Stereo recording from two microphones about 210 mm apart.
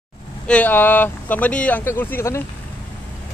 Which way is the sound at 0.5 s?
10° left (ahead or behind).